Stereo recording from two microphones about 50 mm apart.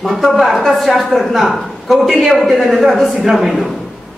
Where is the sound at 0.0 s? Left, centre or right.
Centre.